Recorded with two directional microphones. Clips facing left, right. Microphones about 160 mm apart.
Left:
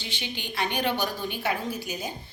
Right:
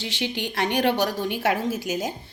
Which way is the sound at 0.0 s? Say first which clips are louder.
Right 8 dB; 90° right.